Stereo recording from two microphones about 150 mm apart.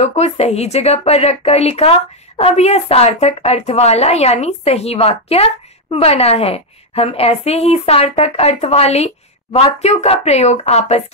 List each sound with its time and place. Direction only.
0.0 s a woman's voice: 45° left (ahead or behind)